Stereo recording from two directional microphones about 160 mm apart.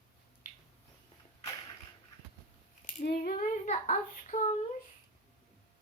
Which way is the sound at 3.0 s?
80° left.